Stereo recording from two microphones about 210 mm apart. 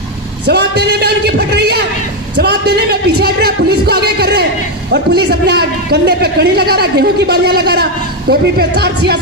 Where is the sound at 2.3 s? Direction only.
50° right (ahead or behind).